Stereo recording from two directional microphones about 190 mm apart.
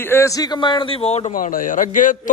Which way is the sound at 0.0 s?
15° left (ahead or behind).